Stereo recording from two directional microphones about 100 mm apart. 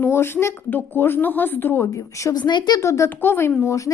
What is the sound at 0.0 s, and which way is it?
A woman's voice, 25° left (ahead or behind).